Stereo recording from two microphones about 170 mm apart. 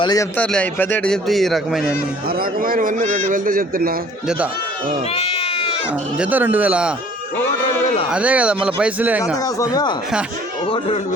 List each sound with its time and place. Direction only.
0.0 s speech: 20° left (ahead or behind)
0.3 s speech: 5° left (ahead or behind)
2.3 s a man's voice: 60° right (ahead or behind)
5.1 s goat: 35° left (ahead or behind)
6.1 s speech: 10° right (ahead or behind)
8.1 s speech: 10° right (ahead or behind)
9.4 s speech: 20° left (ahead or behind)
10.7 s speech: 35° left (ahead or behind)